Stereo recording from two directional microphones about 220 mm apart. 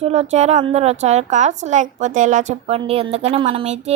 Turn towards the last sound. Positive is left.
turn(degrees=-30)  # may be behind; listen again after turning